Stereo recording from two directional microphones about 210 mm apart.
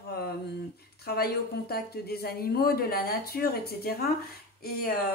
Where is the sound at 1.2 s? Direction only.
50° left (ahead or behind).